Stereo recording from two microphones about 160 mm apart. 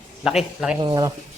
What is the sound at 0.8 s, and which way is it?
Speech, 25° right (ahead or behind).